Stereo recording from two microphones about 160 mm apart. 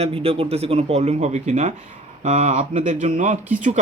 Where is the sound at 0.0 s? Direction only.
35° right (ahead or behind).